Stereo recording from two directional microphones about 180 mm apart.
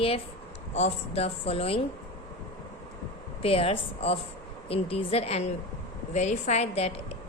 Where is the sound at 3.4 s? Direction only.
30° left (ahead or behind).